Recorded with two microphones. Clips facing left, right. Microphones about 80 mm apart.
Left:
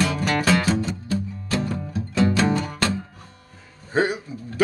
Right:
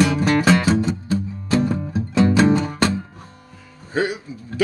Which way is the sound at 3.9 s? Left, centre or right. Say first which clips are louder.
Even; left.